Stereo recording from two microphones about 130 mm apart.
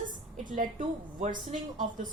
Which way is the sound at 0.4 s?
90° right.